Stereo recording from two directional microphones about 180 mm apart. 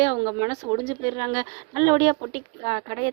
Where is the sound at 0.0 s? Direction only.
30° right (ahead or behind).